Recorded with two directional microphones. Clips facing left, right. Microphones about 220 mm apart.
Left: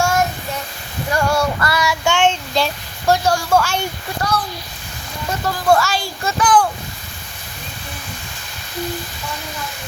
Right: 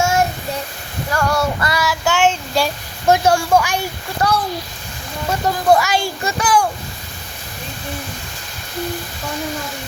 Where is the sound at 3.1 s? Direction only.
20° right (ahead or behind).